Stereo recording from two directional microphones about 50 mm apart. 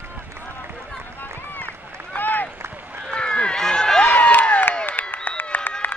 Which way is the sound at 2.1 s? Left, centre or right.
Left.